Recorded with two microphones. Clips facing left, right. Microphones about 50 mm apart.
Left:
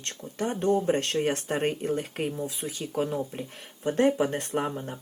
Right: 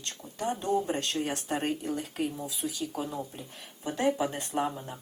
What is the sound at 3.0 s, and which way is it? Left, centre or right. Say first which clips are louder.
Speech: left 6 dB; left.